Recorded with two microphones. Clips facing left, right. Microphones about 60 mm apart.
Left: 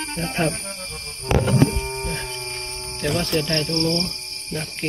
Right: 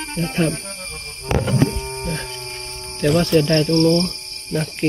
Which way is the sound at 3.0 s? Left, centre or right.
Centre.